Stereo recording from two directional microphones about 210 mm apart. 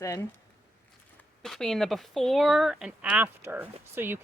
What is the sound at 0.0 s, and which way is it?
Speech, 15° left (ahead or behind).